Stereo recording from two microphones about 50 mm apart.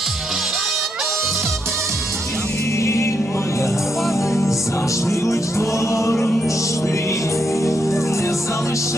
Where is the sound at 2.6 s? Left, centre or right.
Left.